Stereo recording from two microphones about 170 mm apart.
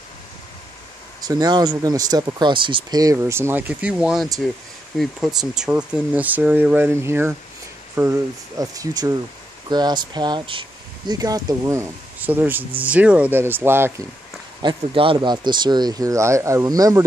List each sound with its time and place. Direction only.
1.2 s speech: 25° right (ahead or behind)
14.6 s speech: 30° right (ahead or behind)